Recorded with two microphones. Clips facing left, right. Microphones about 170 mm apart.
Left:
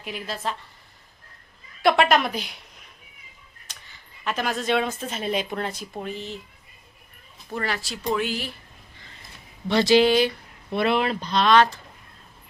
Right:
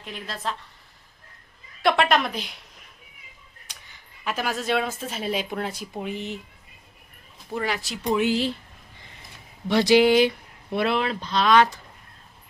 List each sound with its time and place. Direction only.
0.0 s speech: 5° left (ahead or behind)
1.8 s speech: centre (ahead or behind)
3.7 s speech: 10° right (ahead or behind)
7.5 s speech: 15° right (ahead or behind)
9.6 s speech: 15° right (ahead or behind)
10.8 s speech: centre (ahead or behind)